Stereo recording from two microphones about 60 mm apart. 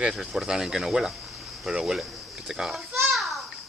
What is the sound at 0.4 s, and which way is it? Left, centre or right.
Speech, centre.